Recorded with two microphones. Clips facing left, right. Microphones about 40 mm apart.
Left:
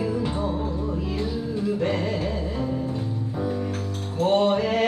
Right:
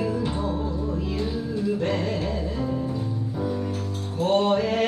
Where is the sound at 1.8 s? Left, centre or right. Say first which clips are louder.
Left 1 dB; left.